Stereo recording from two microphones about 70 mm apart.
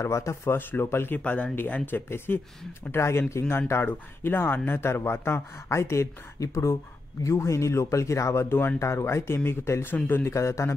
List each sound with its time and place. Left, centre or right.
0.0 s speech: left
0.6 s speech: left
1.1 s speech: left
10.2 s speech: left